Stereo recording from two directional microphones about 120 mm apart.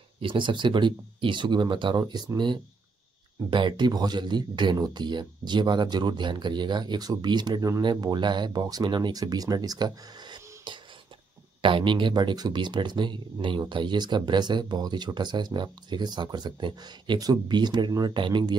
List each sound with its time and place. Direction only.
0.2 s speech: 45° right (ahead or behind)